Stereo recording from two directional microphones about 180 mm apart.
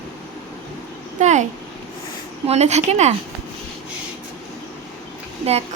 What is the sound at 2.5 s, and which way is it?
Speech, 35° right (ahead or behind).